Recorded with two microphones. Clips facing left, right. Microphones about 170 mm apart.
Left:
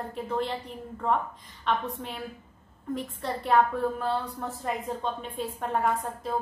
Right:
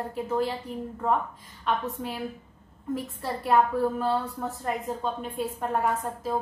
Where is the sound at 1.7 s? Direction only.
5° right (ahead or behind).